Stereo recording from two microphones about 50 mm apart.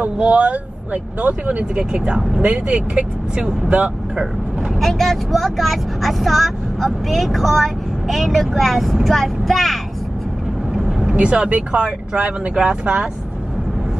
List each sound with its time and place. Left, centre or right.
0.0 s speech: right
4.7 s speech: centre
10.8 s vehicle: centre
11.1 s speech: right